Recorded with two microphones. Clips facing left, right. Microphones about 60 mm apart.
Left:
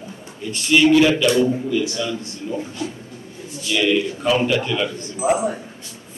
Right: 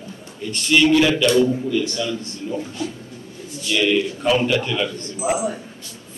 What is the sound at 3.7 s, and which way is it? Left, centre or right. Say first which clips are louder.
Speech: even; centre.